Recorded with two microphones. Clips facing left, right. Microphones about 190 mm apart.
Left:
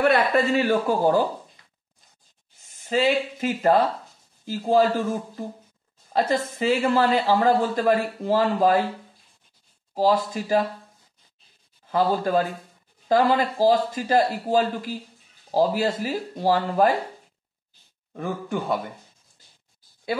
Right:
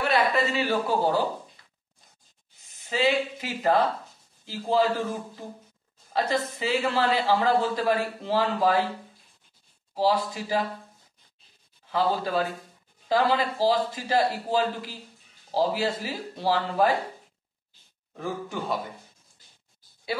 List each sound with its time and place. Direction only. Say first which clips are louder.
0.0 s a man's voice: left 4 dB; 55° left (ahead or behind)
2.7 s a man's voice: left 3 dB; 45° left (ahead or behind)
6.1 s a man's voice: left 3 dB; 50° left (ahead or behind)
9.9 s a man's voice: left 3 dB; 45° left (ahead or behind)
11.9 s a man's voice: left 4 dB; 50° left (ahead or behind)
18.1 s a man's voice: left 4 dB; 60° left (ahead or behind)